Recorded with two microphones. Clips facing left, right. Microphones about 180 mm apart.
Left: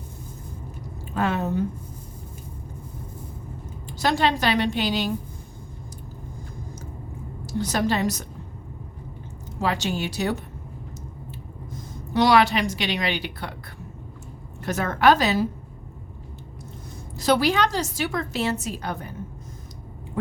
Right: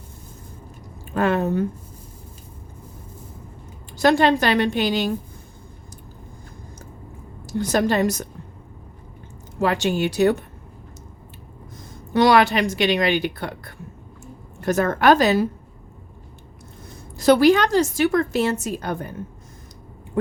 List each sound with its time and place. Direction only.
1.1 s speech: 55° right (ahead or behind)
4.0 s a woman's voice: 55° right (ahead or behind)
7.7 s a woman's voice: 50° right (ahead or behind)
9.6 s speech: 55° right (ahead or behind)
12.1 s a woman's voice: 55° right (ahead or behind)
17.2 s a woman's voice: 55° right (ahead or behind)